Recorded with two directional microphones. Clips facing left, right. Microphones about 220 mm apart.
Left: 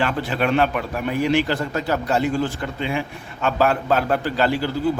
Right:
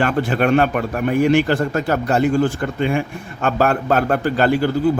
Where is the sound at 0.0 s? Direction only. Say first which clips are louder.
Right 4 dB; 50° right (ahead or behind).